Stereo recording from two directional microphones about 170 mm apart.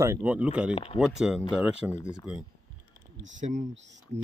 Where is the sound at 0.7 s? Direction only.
35° left (ahead or behind).